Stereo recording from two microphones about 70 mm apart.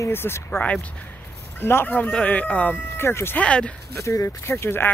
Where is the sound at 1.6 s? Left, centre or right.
Left.